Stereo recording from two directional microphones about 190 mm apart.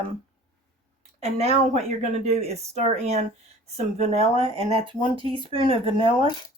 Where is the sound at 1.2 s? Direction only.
35° right (ahead or behind).